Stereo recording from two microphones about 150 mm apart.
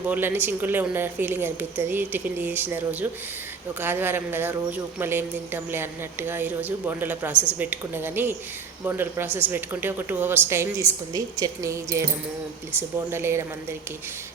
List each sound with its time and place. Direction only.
0.1 s speech: 15° right (ahead or behind)
13.1 s speech: 15° right (ahead or behind)